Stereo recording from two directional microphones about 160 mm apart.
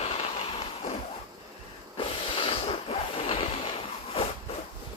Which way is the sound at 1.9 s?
35° left (ahead or behind).